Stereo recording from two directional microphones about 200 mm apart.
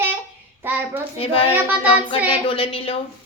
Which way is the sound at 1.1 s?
30° left (ahead or behind).